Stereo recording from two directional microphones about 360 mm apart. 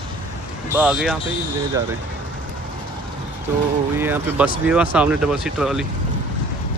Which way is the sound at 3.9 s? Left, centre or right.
Centre.